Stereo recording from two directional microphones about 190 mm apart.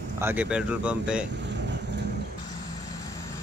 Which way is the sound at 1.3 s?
65° right (ahead or behind).